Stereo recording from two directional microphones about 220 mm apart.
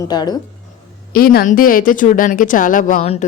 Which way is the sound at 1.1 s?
40° left (ahead or behind).